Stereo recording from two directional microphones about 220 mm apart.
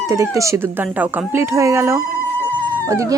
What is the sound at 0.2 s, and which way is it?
Speech, 15° right (ahead or behind).